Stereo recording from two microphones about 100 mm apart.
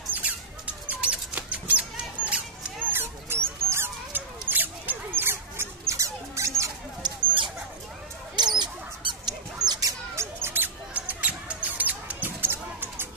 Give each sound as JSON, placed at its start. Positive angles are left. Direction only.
{"t": 0.1, "sound": "a sound", "side_deg": -15}
{"t": 2.9, "sound": "mouse", "side_deg": -25}
{"t": 7.0, "sound": "a sound", "side_deg": -55}
{"t": 8.4, "sound": "dog", "side_deg": -45}
{"t": 9.7, "sound": "rodents", "side_deg": -35}
{"t": 10.4, "sound": "rodents", "side_deg": -20}